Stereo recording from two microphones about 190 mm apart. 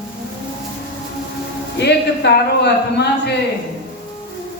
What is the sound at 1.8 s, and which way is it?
A man's voice, 60° left (ahead or behind).